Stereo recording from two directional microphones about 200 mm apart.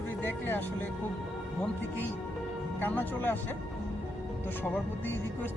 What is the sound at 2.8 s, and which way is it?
Music, 10° left (ahead or behind).